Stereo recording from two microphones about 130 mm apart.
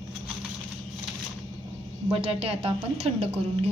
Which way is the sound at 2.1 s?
50° right (ahead or behind).